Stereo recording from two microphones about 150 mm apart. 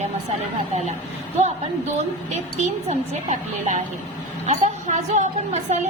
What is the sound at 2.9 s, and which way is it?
A woman's voice, 50° right (ahead or behind).